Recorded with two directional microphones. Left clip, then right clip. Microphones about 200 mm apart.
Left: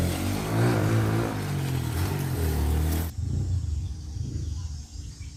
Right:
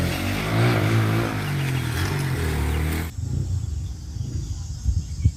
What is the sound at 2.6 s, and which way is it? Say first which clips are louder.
Vehicle: right 4 dB; 30° left (ahead or behind).